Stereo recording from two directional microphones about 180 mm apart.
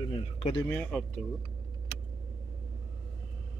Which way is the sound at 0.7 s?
5° left (ahead or behind).